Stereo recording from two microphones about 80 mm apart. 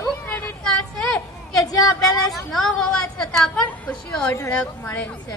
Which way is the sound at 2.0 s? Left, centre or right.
Left.